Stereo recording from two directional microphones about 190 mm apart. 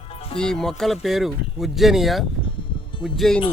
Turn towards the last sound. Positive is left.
turn(degrees=0)  # may be behind; listen again after turning